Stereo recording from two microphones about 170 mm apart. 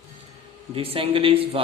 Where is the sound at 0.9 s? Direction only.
30° right (ahead or behind).